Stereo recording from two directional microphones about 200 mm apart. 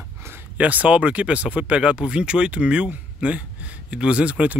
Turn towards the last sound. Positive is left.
turn(degrees=-5)  # may be behind; listen again after turning